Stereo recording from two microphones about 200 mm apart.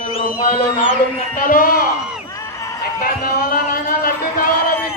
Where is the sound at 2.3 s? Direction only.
15° left (ahead or behind).